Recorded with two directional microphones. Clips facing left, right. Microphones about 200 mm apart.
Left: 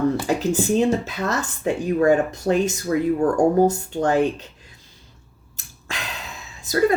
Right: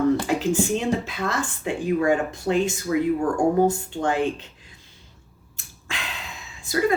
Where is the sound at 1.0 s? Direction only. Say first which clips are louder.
Left 2 dB; 40° left (ahead or behind).